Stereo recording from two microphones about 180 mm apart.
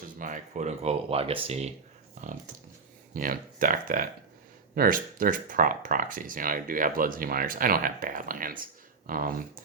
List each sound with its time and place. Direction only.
0.2 s speech: 45° right (ahead or behind)